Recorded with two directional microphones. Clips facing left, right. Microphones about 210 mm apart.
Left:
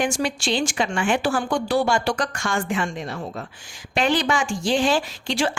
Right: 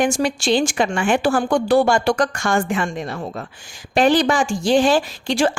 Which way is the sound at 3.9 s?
35° right (ahead or behind).